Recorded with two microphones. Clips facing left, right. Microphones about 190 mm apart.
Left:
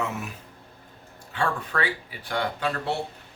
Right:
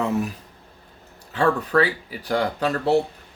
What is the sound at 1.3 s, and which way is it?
Speech, 40° right (ahead or behind).